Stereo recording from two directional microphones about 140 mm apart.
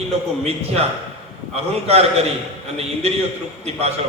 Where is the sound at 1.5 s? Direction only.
45° right (ahead or behind).